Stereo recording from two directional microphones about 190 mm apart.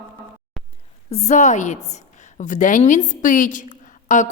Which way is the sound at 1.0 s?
35° left (ahead or behind).